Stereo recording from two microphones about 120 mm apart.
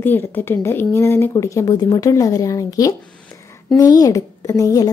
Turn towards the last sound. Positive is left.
turn(degrees=30)  # may be behind; listen again after turning